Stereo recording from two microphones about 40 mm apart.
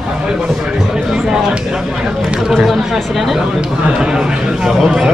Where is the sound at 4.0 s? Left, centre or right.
Right.